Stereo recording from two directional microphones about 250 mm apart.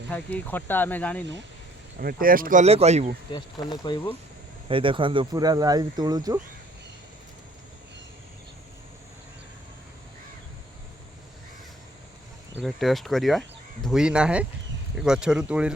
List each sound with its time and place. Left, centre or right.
0.1 s speech: centre
2.0 s speech: right
3.3 s speech: centre
4.7 s speech: right
12.5 s speech: centre